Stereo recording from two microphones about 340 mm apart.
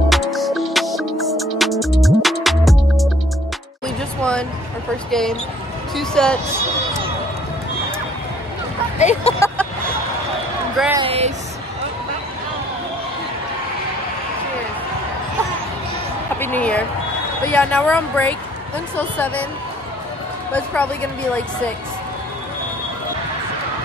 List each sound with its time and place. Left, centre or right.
0.1 s music: centre
4.2 s a sound: centre
5.1 s speech: centre
8.9 s speech: centre
10.8 s speech: centre
16.3 s music: centre
17.5 s speech: centre
20.5 s speech: centre